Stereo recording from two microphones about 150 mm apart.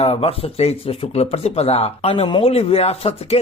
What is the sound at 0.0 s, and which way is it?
Speech, 45° left (ahead or behind).